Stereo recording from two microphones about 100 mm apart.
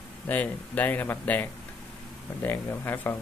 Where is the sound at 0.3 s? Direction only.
15° left (ahead or behind).